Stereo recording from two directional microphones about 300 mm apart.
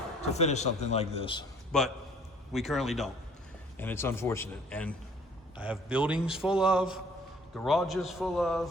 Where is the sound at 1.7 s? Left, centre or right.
Centre.